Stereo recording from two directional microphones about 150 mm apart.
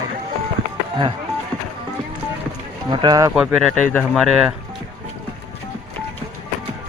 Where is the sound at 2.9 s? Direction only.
30° right (ahead or behind).